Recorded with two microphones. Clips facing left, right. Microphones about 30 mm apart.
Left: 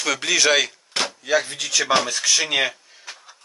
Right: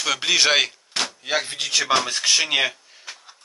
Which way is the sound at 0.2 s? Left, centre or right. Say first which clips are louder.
Even; right.